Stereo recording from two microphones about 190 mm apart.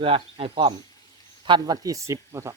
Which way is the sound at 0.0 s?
30° right (ahead or behind).